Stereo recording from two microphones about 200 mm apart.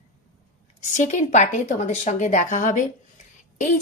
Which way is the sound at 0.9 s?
35° left (ahead or behind).